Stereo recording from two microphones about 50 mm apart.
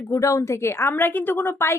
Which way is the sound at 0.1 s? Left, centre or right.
Left.